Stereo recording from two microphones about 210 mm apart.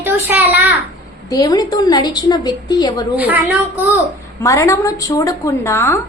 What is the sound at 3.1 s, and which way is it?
Speech, 10° right (ahead or behind).